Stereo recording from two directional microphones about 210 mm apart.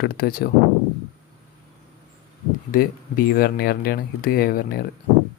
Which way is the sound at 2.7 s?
45° left (ahead or behind).